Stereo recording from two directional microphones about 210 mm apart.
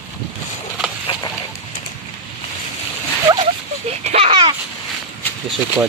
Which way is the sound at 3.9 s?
30° right (ahead or behind).